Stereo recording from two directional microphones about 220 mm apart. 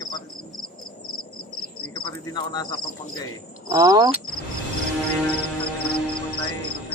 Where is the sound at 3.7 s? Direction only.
15° right (ahead or behind).